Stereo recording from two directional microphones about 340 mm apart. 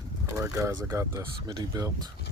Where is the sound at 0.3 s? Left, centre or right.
Centre.